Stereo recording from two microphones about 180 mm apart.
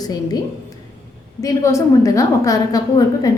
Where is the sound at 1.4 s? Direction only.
15° left (ahead or behind).